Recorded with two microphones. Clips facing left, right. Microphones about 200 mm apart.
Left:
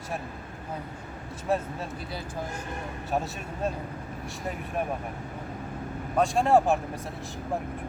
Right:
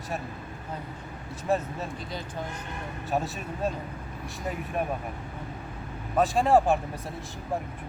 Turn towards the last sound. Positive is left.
turn(degrees=0)  # may be behind; listen again after turning